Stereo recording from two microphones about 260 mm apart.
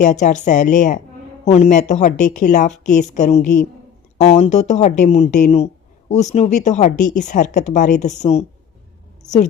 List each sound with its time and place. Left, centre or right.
0.0 s speech: left